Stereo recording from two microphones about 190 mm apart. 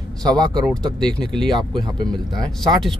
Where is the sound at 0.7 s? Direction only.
5° left (ahead or behind).